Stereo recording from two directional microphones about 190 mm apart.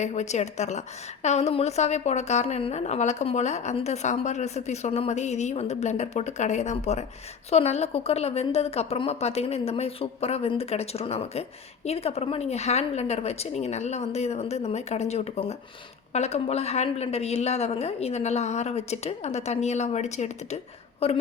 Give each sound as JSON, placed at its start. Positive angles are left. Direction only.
{"t": 0.0, "sound": "a woman's voice", "side_deg": 35}